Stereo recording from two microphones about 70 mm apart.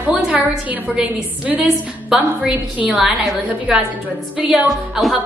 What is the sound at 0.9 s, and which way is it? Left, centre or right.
Speech, centre.